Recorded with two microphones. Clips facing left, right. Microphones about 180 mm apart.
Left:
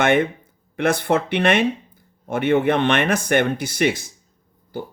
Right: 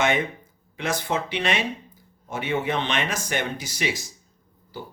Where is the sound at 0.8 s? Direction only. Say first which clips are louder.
Left 7 dB; 60° left (ahead or behind).